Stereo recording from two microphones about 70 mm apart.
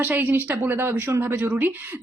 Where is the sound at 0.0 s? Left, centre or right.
Right.